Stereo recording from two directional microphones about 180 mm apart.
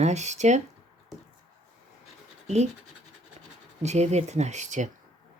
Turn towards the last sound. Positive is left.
turn(degrees=-40)  # may be behind; listen again after turning